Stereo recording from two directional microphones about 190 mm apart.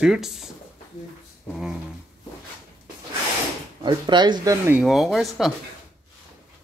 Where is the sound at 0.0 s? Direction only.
Centre (ahead or behind).